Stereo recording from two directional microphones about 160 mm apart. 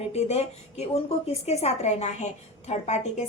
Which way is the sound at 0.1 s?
45° left (ahead or behind).